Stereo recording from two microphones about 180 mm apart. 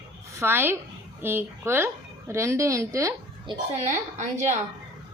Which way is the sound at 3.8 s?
45° right (ahead or behind).